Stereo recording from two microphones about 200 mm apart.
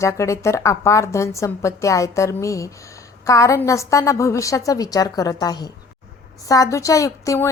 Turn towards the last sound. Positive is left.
turn(degrees=15)  # may be behind; listen again after turning